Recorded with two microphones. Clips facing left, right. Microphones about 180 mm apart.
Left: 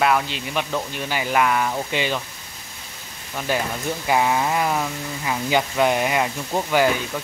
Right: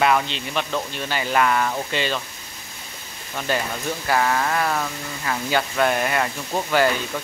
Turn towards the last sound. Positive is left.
turn(degrees=10)  # may be behind; listen again after turning